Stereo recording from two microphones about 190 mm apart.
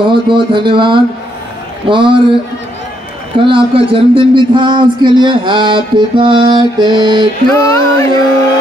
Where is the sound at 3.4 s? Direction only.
25° right (ahead or behind).